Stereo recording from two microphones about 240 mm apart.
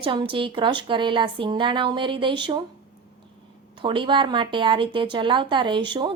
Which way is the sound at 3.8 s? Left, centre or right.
Right.